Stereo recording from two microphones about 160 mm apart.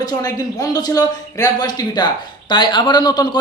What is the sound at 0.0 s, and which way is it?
Speech, 25° left (ahead or behind).